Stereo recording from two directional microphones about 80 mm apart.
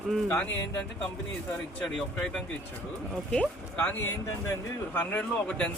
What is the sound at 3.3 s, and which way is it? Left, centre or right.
Speech, centre.